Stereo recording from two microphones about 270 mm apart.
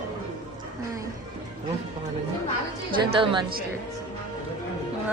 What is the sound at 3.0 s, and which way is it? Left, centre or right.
Speech, centre.